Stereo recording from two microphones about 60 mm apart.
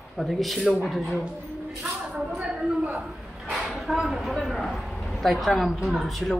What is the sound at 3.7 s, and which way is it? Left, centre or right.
A woman's voice, centre.